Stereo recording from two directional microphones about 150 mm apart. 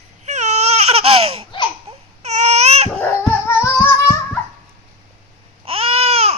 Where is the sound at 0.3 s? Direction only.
50° right (ahead or behind).